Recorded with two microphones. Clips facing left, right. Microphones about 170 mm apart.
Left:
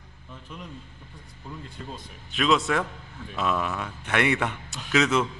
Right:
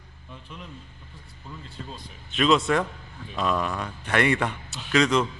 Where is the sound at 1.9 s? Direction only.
Centre (ahead or behind).